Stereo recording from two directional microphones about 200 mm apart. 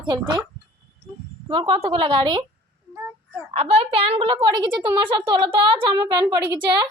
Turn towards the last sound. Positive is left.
turn(degrees=-20)  # may be behind; listen again after turning